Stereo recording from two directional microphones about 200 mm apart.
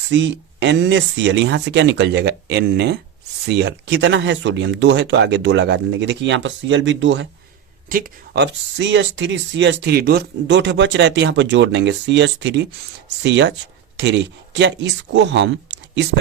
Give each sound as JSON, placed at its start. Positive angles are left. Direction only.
{"t": 0.1, "sound": "speech", "side_deg": -65}
{"t": 7.9, "sound": "speech", "side_deg": -45}